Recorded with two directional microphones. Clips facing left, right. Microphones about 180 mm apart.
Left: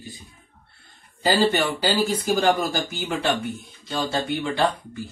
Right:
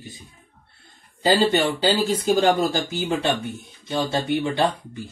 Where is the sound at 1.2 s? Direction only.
20° right (ahead or behind).